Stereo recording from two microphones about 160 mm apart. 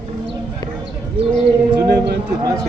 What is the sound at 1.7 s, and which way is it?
Speech, 90° right.